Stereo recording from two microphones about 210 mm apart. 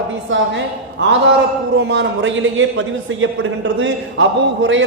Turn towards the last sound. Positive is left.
turn(degrees=-65)  # may be behind; listen again after turning